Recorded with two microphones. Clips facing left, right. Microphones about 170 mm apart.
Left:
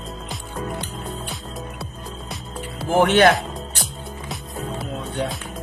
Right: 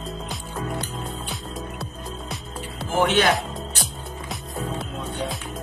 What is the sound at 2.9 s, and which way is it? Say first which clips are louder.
Speech: left 5 dB; 55° left (ahead or behind).